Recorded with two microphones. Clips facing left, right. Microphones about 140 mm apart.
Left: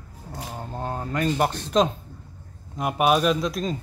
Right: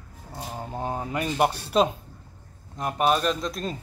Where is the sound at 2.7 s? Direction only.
10° left (ahead or behind).